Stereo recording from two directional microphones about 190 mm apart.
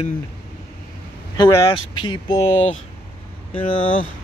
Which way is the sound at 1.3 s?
20° left (ahead or behind).